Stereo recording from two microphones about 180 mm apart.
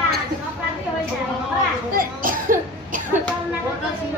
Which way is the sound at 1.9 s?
50° right (ahead or behind).